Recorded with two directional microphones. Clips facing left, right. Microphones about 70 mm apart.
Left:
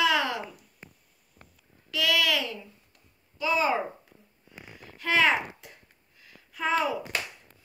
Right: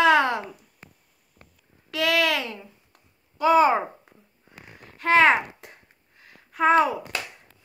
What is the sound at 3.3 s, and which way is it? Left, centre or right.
Speech, right.